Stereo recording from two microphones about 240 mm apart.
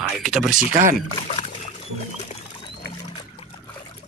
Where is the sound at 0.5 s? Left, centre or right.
Right.